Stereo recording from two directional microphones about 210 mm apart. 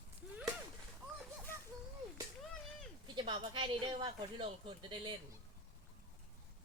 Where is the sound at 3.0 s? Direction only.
25° right (ahead or behind).